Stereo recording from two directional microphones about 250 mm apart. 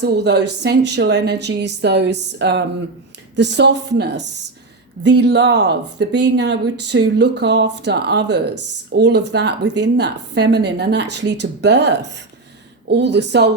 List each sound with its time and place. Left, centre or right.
0.0 s speech: right